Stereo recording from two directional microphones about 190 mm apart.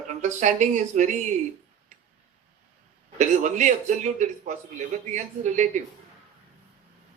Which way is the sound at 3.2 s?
40° right (ahead or behind).